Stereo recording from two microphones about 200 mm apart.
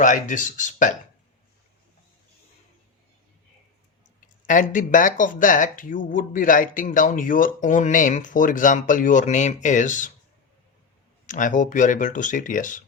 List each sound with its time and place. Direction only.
0.0 s speech: 40° left (ahead or behind)
4.4 s speech: 40° left (ahead or behind)
11.3 s speech: 40° left (ahead or behind)